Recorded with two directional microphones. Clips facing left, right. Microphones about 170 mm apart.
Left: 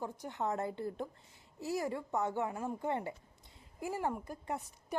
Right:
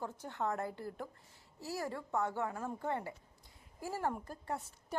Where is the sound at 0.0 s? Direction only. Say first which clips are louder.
Left 1 dB; 15° left (ahead or behind).